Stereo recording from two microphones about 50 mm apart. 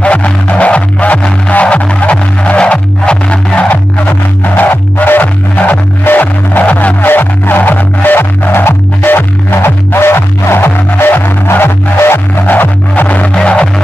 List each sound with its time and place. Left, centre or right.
0.0 s music: left
4.6 s music: left
7.1 s music: left
12.4 s music: left
13.3 s music: centre